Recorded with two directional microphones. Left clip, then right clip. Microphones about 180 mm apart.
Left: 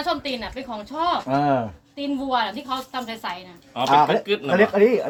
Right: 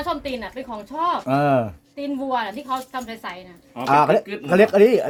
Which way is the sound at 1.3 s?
65° right (ahead or behind).